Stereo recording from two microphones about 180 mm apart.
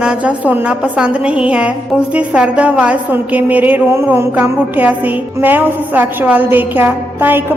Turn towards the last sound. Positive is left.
turn(degrees=-10)  # may be behind; listen again after turning